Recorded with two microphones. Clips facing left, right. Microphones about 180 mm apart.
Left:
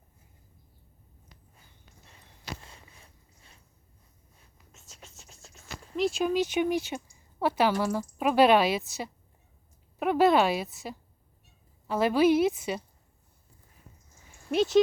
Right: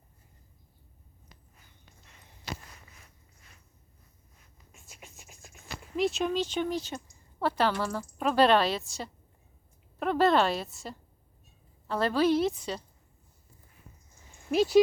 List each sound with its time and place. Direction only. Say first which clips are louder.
2.6 s walk: left 1 dB; 30° left (ahead or behind)
4.7 s scratch: right 1 dB; 15° right (ahead or behind)
6.0 s speech: left 2 dB; centre (ahead or behind)
14.5 s speech: even; centre (ahead or behind)